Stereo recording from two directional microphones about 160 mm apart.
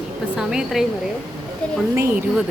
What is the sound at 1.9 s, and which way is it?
Speech, 15° right (ahead or behind).